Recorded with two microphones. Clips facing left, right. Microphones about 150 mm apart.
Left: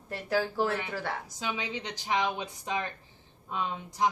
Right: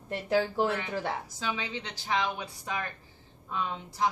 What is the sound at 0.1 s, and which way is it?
Speech, 20° right (ahead or behind).